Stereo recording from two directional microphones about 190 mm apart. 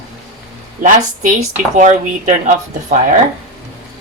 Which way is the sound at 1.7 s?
40° right (ahead or behind).